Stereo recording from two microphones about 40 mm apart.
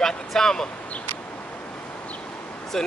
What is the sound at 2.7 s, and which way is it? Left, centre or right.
Speech, centre.